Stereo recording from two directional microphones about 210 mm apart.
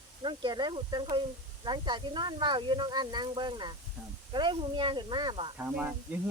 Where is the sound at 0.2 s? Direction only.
20° right (ahead or behind).